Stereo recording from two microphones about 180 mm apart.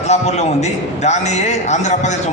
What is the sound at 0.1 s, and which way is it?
A man's voice, 40° left (ahead or behind).